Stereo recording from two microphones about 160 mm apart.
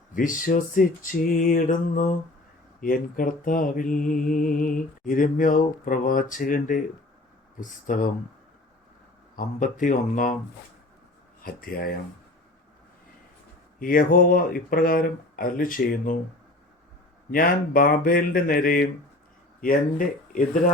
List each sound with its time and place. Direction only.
0.1 s mantra: 55° left (ahead or behind)
9.3 s mantra: 60° left (ahead or behind)
11.4 s speech: 65° left (ahead or behind)
13.7 s mantra: 60° left (ahead or behind)
17.3 s mantra: 60° left (ahead or behind)